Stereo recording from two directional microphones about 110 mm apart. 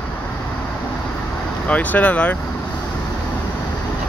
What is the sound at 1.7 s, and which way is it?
Speech, 15° left (ahead or behind).